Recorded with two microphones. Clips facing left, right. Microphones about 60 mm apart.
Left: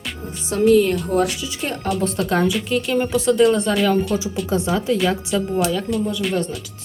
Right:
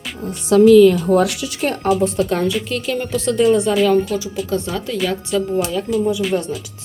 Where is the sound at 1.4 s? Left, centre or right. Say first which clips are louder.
Right 5 dB; right.